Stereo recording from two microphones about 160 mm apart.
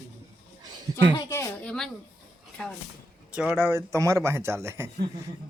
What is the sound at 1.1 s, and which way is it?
Speech, 20° left (ahead or behind).